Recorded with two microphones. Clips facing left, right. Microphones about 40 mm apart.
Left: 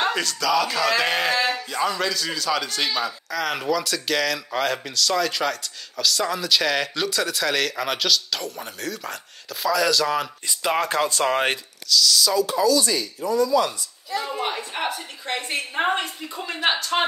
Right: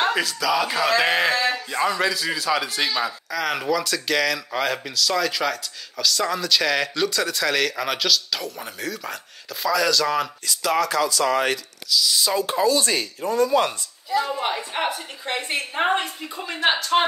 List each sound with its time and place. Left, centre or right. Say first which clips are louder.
0.0 s speech: right 1 dB; centre
0.7 s a woman's voice: right 2 dB; centre
10.4 s speech: right 1 dB; left
10.9 s speech: right 1 dB; left
11.9 s a woman's voice: left 2 dB; centre
12.2 s speech: left 1 dB; right
14.4 s a woman's voice: right 2 dB; centre